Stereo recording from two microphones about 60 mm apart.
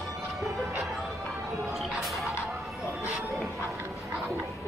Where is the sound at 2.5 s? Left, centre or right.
Centre.